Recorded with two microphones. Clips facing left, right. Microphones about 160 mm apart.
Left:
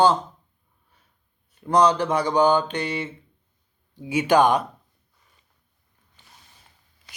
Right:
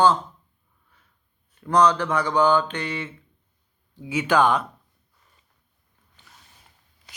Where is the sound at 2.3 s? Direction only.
15° left (ahead or behind).